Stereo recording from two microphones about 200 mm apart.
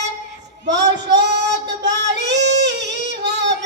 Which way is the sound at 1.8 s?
60° right (ahead or behind).